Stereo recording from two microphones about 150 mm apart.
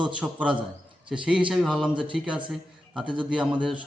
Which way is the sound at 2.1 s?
5° right (ahead or behind).